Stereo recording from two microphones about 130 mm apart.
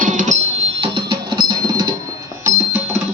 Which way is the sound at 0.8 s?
35° right (ahead or behind).